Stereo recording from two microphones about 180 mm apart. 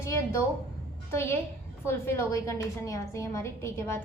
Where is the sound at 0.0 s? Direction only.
15° left (ahead or behind).